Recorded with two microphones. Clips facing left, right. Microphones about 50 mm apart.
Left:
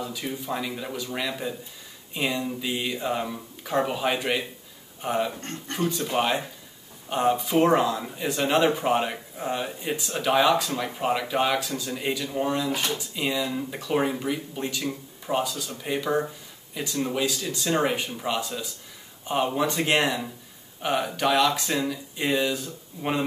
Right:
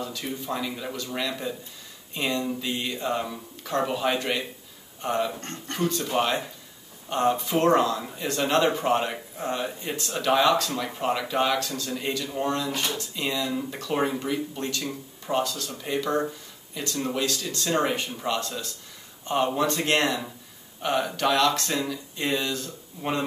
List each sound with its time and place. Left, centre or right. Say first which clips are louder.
0.0 s speech: left 1 dB; centre